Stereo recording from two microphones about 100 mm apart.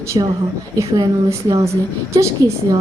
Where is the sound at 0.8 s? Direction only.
35° right (ahead or behind).